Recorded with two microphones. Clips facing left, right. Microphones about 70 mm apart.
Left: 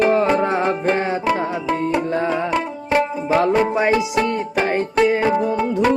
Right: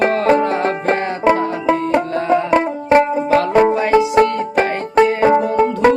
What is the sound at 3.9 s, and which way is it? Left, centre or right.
Music, right.